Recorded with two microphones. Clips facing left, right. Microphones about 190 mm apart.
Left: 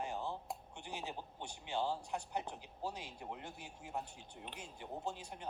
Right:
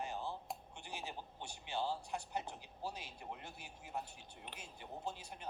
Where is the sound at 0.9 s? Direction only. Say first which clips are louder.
Left 2 dB; 15° left (ahead or behind).